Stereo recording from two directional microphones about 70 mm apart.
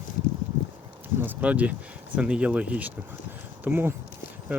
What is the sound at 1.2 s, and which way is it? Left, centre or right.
Speech, right.